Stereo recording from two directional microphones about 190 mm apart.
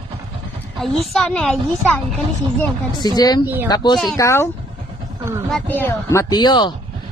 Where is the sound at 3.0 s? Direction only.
20° left (ahead or behind).